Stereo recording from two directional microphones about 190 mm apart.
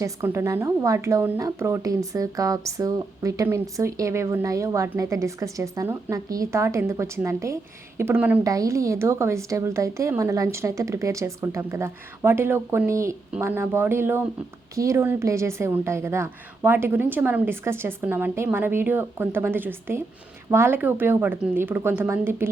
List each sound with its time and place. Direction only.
0.0 s a woman's voice: 15° right (ahead or behind)